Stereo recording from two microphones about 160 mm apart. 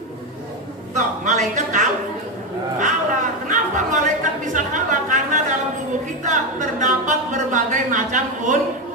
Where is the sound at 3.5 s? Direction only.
50° right (ahead or behind).